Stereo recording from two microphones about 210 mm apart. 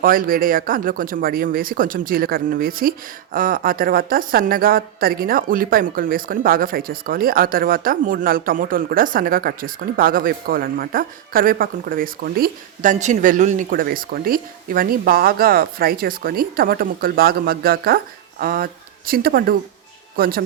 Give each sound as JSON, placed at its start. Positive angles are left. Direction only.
{"t": 0.0, "sound": "a woman's voice", "side_deg": -45}